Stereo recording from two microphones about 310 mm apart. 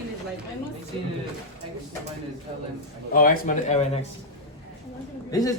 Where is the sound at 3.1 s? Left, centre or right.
Left.